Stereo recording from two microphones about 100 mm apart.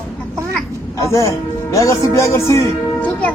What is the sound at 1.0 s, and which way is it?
Speech, 30° left (ahead or behind).